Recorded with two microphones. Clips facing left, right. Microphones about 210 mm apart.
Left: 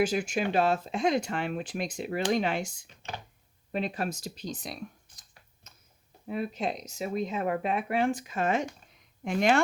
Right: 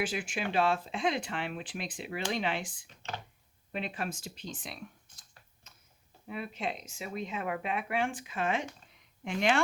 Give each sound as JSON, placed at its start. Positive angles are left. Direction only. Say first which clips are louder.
{"t": 0.0, "sound": "speech", "louder": "left 7 dB", "side_deg": 40}
{"t": 5.7, "sound": "a sound", "louder": "left 3 dB", "side_deg": 40}
{"t": 6.2, "sound": "speech", "louder": "left 5 dB", "side_deg": 40}